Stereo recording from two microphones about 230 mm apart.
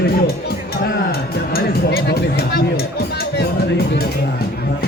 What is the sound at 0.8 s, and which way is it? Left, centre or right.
Music, left.